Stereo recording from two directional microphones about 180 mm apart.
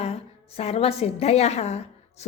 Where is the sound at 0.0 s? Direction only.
35° left (ahead or behind).